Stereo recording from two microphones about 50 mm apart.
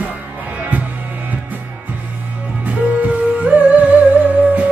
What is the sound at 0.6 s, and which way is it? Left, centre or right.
Music, right.